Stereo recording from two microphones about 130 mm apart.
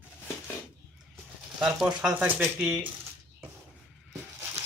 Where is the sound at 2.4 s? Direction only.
5° right (ahead or behind).